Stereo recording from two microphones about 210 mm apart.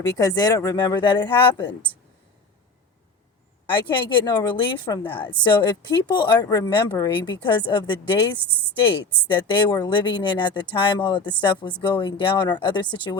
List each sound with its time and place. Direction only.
0.1 s a woman's voice: 15° left (ahead or behind)
3.7 s a woman's voice: 20° left (ahead or behind)
9.3 s a woman's voice: 20° left (ahead or behind)